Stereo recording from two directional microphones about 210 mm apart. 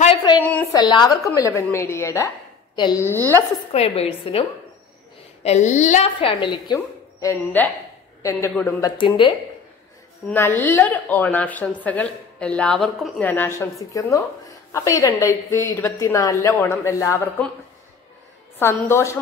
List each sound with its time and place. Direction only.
0.2 s a sound: 20° left (ahead or behind)
0.5 s a woman's voice: 15° left (ahead or behind)
3.7 s a woman's voice: 30° left (ahead or behind)
10.2 s a woman's voice: 10° left (ahead or behind)
18.6 s a woman's voice: 10° left (ahead or behind)